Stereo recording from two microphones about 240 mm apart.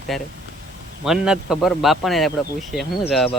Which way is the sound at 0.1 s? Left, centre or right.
Centre.